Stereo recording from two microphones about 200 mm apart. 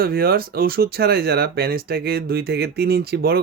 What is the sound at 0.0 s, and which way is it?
Speech, 50° right (ahead or behind).